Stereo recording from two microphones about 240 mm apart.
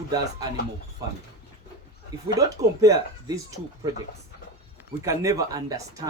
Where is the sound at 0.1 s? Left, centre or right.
Centre.